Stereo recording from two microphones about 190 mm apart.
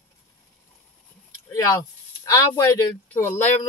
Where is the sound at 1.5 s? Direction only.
15° left (ahead or behind).